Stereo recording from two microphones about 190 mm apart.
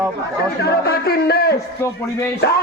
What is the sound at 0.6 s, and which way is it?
A man's voice, 60° left (ahead or behind).